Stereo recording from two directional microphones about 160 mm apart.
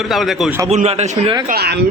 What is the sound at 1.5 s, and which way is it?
Speech, 80° right.